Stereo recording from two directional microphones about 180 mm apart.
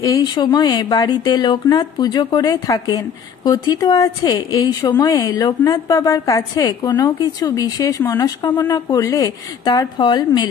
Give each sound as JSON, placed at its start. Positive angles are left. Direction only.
{"t": 0.0, "sound": "a woman's voice", "side_deg": 20}